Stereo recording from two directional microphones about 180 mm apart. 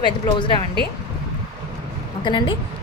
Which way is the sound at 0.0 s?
25° left (ahead or behind).